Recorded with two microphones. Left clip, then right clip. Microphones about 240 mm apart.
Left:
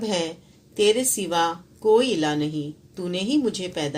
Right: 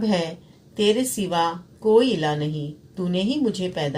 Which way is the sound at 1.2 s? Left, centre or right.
Left.